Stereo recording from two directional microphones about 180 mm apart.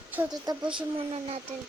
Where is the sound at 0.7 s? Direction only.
30° right (ahead or behind).